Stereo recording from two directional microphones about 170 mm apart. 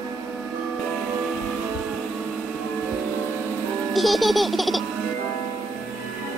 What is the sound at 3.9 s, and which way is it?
Baby laughter, centre (ahead or behind).